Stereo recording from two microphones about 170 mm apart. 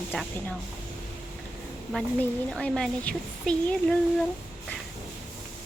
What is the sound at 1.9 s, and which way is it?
Speech, 5° left (ahead or behind).